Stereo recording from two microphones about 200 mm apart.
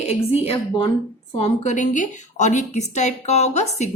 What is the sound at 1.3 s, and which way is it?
A woman's voice, 30° left (ahead or behind).